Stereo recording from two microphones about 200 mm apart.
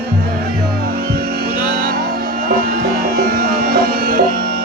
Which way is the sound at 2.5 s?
50° right (ahead or behind).